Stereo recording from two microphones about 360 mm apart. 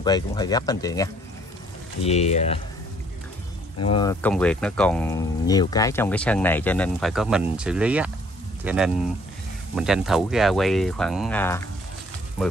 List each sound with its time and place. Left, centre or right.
0.0 s speech: centre
3.9 s speech: centre